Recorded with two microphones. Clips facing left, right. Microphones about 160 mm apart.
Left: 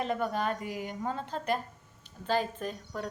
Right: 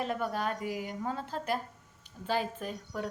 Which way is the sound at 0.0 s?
5° right (ahead or behind).